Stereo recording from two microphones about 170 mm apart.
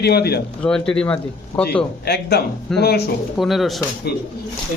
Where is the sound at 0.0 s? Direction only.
70° left (ahead or behind).